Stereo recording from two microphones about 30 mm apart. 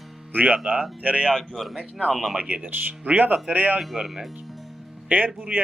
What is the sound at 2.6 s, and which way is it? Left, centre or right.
Speech, right.